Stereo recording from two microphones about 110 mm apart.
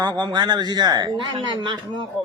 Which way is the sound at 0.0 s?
40° right (ahead or behind).